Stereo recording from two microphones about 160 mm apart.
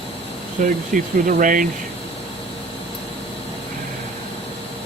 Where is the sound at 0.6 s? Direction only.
50° right (ahead or behind).